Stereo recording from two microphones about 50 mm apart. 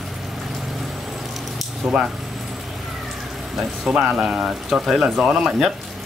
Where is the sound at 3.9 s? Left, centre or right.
Centre.